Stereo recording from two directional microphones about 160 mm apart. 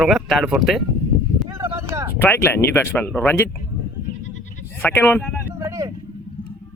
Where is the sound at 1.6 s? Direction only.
15° right (ahead or behind).